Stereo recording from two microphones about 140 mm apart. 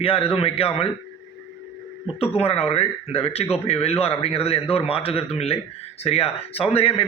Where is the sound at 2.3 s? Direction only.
45° left (ahead or behind).